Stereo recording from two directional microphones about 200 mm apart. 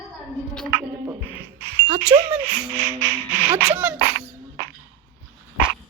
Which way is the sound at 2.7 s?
10° left (ahead or behind).